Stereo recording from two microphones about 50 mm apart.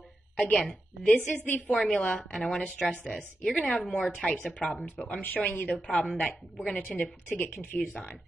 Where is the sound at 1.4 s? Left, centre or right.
Left.